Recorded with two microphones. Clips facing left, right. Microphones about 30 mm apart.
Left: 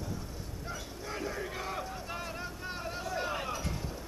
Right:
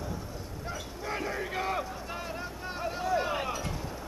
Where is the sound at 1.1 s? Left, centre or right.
Right.